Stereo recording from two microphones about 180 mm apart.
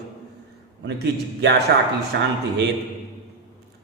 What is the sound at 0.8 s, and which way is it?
A man's voice, 75° right (ahead or behind).